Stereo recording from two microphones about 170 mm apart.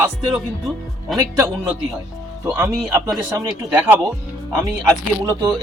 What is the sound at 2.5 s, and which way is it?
Speech, 10° right (ahead or behind).